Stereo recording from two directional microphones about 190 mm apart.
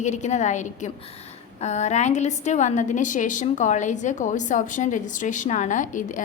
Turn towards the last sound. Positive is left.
turn(degrees=40)  # may be behind; listen again after turning